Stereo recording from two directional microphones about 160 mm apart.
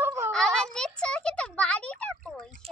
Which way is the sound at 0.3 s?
5° left (ahead or behind).